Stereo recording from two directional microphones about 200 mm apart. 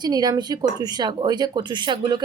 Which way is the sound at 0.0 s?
20° right (ahead or behind).